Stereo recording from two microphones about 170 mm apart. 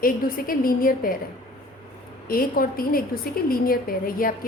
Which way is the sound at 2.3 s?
60° left (ahead or behind).